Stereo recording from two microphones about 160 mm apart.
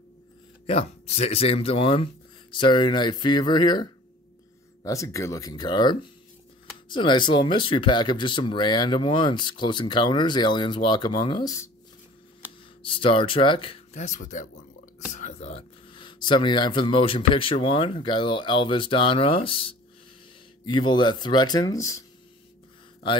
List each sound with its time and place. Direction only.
0.7 s speech: 40° left (ahead or behind); by 11.7 s 20° left (ahead or behind)
12.8 s speech: 35° left (ahead or behind)
13.9 s speech: 50° left (ahead or behind); by 22.0 s 20° left (ahead or behind)